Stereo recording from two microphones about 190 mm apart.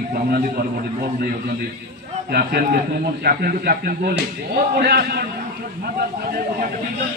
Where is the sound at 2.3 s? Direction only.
55° right (ahead or behind).